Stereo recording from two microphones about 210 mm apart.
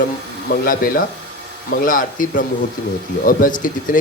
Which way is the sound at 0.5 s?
45° left (ahead or behind).